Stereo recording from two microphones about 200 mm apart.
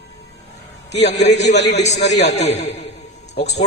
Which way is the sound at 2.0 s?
60° left (ahead or behind).